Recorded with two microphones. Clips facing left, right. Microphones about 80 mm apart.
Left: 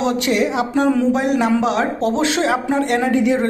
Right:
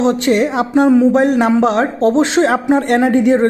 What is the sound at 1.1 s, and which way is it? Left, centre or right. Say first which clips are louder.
A woman's voice: right 5 dB; right.